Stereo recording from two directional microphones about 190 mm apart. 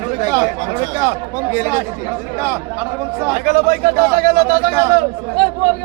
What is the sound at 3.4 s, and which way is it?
A man's voice, 45° right (ahead or behind).